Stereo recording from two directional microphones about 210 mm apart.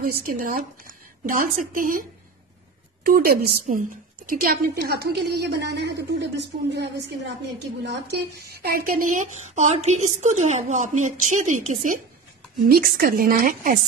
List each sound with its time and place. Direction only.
0.2 s a woman's voice: 40° right (ahead or behind)